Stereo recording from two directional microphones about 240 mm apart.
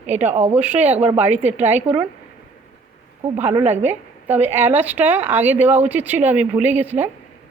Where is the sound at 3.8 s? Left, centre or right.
Centre.